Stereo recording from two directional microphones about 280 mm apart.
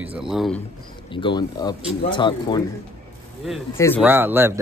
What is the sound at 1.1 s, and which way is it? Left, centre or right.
Speech, centre.